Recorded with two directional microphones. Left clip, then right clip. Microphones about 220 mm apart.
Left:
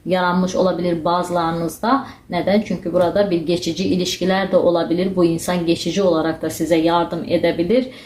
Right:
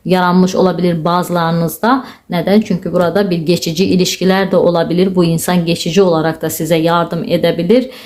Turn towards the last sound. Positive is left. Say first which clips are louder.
# right 5 dB
turn(degrees=-40)  # may be behind; listen again after turning